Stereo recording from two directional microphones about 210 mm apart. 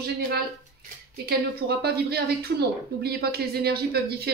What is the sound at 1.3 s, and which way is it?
A woman's voice, 50° right (ahead or behind).